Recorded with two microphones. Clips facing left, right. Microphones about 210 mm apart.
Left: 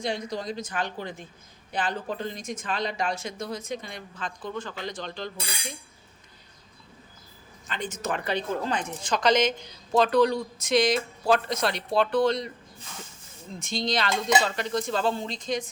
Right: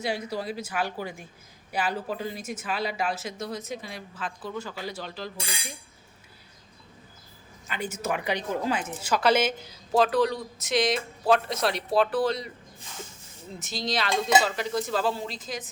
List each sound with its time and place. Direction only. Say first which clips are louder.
0.0 s a woman's voice: even; 5° right (ahead or behind)
7.7 s a woman's voice: right 1 dB; 10° right (ahead or behind)
13.6 s a woman's voice: left 2 dB; 5° right (ahead or behind)